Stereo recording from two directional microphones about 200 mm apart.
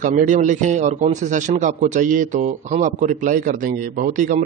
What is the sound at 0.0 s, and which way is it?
A man's voice, 40° right (ahead or behind).